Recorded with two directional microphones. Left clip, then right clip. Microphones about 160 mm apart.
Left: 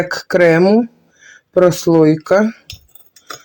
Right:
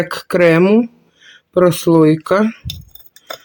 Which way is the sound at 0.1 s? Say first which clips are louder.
Left 2 dB; 30° right (ahead or behind).